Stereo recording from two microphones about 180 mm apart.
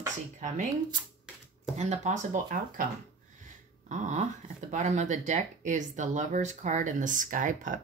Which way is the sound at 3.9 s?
40° right (ahead or behind).